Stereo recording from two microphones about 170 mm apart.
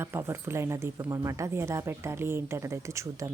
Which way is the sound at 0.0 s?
15° right (ahead or behind).